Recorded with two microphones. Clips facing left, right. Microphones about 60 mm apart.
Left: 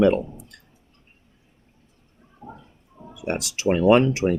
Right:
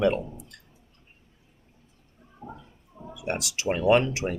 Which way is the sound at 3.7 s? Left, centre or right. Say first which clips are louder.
Left 5 dB; left.